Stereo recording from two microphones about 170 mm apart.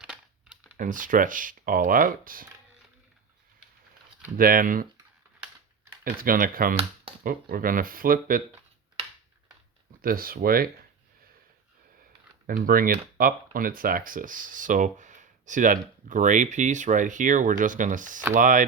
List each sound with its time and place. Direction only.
0.0 s a sound: 5° right (ahead or behind)
0.8 s speech: 50° right (ahead or behind)
4.4 s speech: 55° right (ahead or behind)
6.1 s speech: 55° right (ahead or behind)
10.0 s speech: 60° right (ahead or behind)
12.5 s speech: 55° right (ahead or behind)